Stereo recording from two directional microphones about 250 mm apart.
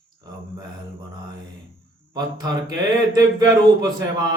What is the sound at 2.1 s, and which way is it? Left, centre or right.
Speech, centre.